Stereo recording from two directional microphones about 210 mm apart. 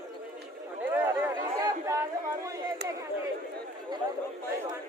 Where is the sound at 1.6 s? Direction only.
15° right (ahead or behind).